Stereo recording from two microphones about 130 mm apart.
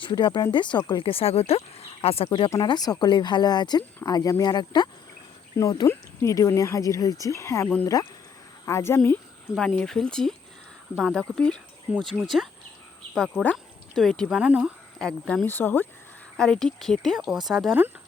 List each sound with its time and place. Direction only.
0.0 s speech: 35° left (ahead or behind)
2.6 s speech: 30° left (ahead or behind)
9.0 s speech: 10° left (ahead or behind)
13.1 s speech: 5° left (ahead or behind)
13.4 s a sound: 10° left (ahead or behind)
14.0 s speech: 5° left (ahead or behind)
14.3 s speech: 10° right (ahead or behind)
14.9 s speech: 5° left (ahead or behind)